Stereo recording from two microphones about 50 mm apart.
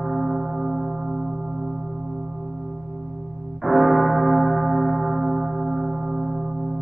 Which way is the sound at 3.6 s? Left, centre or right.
Centre.